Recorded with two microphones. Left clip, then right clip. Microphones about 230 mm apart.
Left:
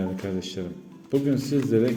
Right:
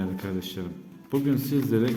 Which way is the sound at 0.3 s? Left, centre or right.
Centre.